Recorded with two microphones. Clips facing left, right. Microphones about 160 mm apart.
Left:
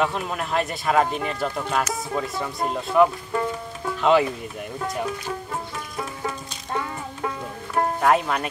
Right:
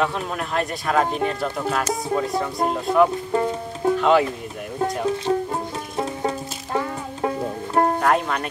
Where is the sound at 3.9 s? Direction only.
Centre (ahead or behind).